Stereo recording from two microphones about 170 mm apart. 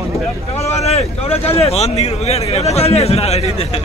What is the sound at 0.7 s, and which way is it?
Speech, 40° left (ahead or behind).